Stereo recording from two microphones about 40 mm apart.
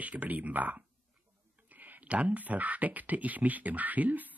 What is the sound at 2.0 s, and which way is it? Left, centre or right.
Speech, right.